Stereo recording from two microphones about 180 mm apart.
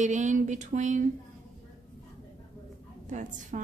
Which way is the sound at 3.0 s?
45° right (ahead or behind).